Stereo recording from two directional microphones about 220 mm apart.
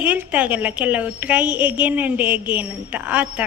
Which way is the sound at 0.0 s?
5° right (ahead or behind).